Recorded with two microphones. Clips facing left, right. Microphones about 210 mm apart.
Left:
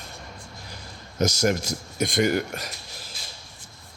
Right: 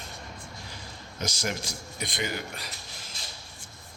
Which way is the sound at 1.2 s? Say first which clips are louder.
Left 10 dB; 45° left (ahead or behind).